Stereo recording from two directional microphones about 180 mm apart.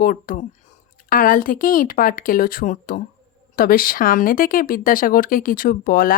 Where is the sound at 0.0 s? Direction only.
50° left (ahead or behind).